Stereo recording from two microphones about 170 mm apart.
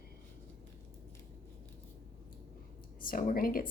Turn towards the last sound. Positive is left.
turn(degrees=60)  # may be behind; listen again after turning